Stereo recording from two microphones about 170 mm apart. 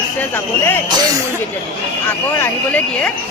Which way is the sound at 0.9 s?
25° right (ahead or behind).